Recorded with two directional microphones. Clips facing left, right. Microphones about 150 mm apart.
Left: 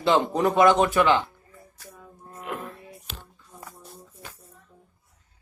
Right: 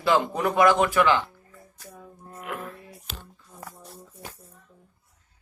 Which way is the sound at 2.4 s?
20° left (ahead or behind).